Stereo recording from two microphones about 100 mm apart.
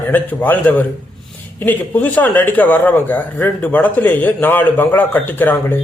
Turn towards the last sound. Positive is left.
turn(degrees=20)  # may be behind; listen again after turning